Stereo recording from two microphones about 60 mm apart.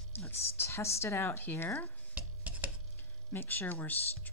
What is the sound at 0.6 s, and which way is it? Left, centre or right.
Speech, left.